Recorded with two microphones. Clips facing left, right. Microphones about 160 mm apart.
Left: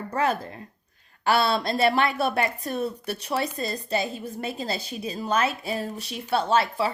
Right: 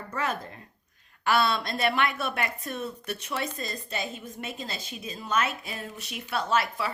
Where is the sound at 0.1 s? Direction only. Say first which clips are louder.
Left 6 dB; 35° left (ahead or behind).